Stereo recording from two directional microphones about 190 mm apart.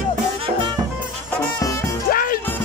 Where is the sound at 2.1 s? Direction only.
50° left (ahead or behind).